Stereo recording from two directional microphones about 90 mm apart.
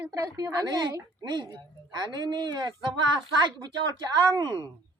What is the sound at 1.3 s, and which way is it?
Speech, 55° right (ahead or behind).